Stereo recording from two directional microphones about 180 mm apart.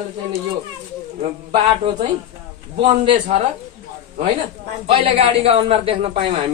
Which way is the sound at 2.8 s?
35° right (ahead or behind).